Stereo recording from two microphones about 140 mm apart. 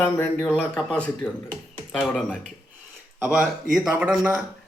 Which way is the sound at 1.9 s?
Centre (ahead or behind).